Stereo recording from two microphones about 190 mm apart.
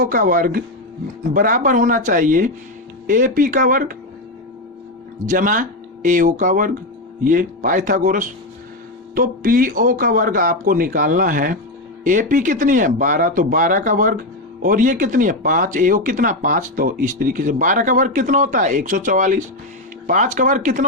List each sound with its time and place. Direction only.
0.0 s speech: 45° right (ahead or behind)
5.2 s speech: 45° right (ahead or behind)